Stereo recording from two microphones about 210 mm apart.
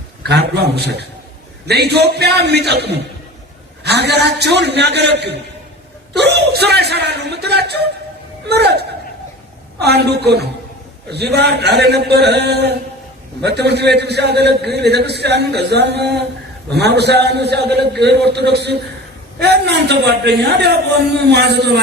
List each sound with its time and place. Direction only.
0.2 s a man's voice: 50° right (ahead or behind)
9.8 s a man's voice: 50° right (ahead or behind)